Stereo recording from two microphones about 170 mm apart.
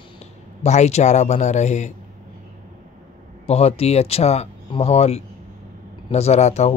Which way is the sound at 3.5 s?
35° left (ahead or behind).